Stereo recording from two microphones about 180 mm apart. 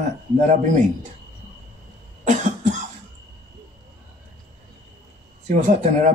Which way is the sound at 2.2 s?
45° right (ahead or behind).